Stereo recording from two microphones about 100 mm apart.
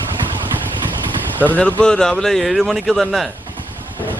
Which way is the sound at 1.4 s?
15° left (ahead or behind).